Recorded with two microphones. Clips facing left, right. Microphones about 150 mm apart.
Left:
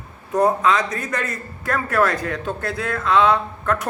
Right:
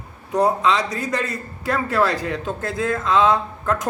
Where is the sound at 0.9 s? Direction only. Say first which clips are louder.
Right 2 dB; 30° right (ahead or behind).